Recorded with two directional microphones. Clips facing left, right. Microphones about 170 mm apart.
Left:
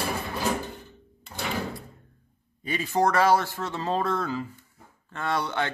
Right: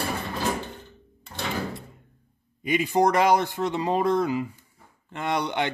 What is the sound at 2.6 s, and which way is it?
Speech, 15° right (ahead or behind).